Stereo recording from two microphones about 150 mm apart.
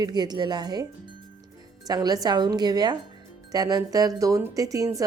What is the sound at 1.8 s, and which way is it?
Speech, 25° right (ahead or behind).